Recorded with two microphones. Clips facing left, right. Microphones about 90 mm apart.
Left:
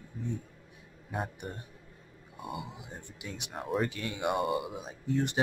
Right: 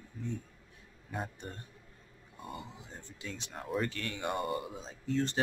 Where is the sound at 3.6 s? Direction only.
Centre (ahead or behind).